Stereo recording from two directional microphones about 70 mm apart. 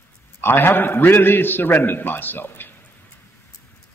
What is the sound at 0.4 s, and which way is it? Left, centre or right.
A man's voice, left.